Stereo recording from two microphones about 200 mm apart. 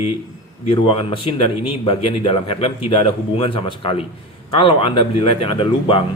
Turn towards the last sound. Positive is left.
turn(degrees=25)  # may be behind; listen again after turning